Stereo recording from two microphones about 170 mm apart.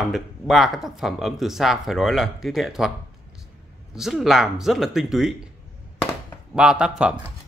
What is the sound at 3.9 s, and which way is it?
Speech, centre (ahead or behind).